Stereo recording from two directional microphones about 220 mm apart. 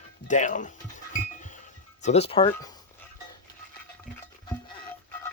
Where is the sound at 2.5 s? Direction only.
15° left (ahead or behind).